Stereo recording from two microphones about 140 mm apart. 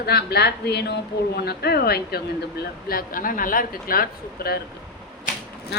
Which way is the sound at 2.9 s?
85° left.